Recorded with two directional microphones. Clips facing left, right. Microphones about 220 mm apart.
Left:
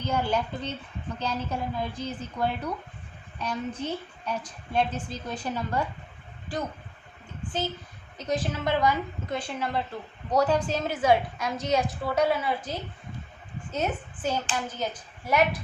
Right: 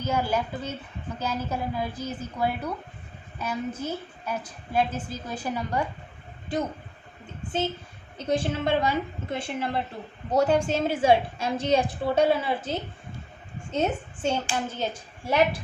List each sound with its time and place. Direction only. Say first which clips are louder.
0.0 s a woman's voice: right 1 dB; 10° right (ahead or behind)
6.5 s a woman's voice: right 4 dB; 20° right (ahead or behind)
8.3 s a woman's voice: right 3 dB; 25° right (ahead or behind)